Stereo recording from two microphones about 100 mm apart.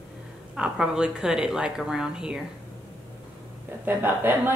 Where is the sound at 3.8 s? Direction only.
20° right (ahead or behind).